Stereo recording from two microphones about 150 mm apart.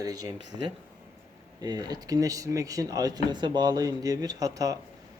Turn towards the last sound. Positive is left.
turn(degrees=-25)  # may be behind; listen again after turning